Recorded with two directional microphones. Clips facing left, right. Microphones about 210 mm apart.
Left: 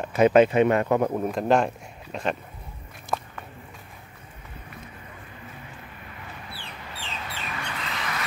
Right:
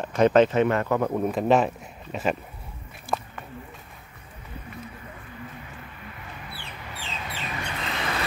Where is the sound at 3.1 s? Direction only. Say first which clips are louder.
Right 1 dB; centre (ahead or behind).